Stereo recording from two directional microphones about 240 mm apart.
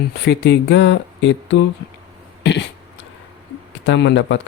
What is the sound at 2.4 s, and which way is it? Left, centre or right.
Throat clearing, left.